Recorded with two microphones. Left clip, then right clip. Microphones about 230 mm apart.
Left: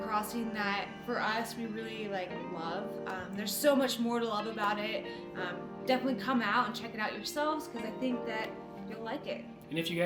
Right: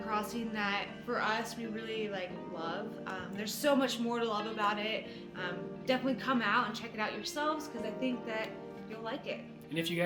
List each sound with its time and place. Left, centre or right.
0.1 s a woman's voice: centre
9.7 s speech: centre